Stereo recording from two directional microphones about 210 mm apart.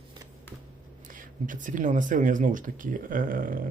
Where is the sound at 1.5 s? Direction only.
40° right (ahead or behind).